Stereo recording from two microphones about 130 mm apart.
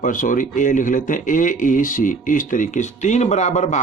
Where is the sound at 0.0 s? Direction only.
90° left.